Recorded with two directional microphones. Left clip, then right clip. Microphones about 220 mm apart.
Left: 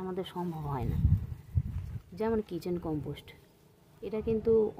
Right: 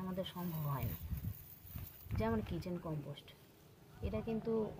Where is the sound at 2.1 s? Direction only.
55° left (ahead or behind).